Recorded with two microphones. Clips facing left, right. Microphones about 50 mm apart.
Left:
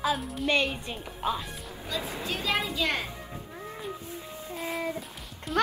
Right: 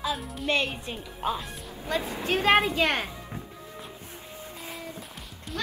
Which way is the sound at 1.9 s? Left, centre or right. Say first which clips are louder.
Right 5 dB; right.